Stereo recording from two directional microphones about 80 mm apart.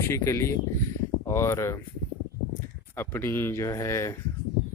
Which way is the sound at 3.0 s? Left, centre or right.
Left.